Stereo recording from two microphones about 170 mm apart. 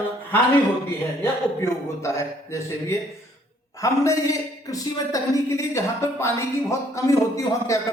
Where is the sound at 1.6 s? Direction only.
15° left (ahead or behind).